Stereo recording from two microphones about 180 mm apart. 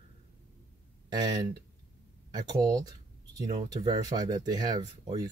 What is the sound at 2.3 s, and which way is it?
Speech, 20° right (ahead or behind).